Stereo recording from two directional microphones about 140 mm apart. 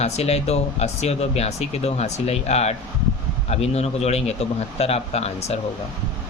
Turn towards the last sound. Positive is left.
turn(degrees=50)  # may be behind; listen again after turning